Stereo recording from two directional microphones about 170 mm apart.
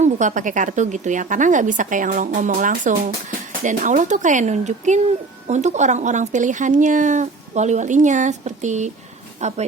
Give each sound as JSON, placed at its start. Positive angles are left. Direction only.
{"t": 0.0, "sound": "a woman's voice", "side_deg": -45}